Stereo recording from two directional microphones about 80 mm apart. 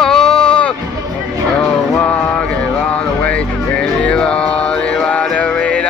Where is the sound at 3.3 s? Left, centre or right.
Centre.